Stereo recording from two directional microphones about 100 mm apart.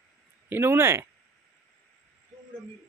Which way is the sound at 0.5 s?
20° right (ahead or behind).